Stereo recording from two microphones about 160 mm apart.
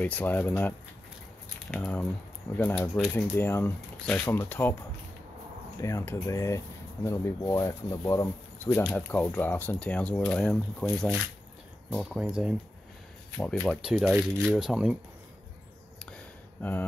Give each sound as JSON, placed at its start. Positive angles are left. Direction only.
{"t": 0.0, "sound": "speech", "side_deg": 10}
{"t": 5.8, "sound": "speech", "side_deg": 20}